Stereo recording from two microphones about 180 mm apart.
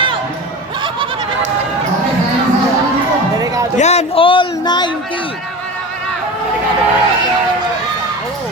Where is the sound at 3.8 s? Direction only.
35° left (ahead or behind).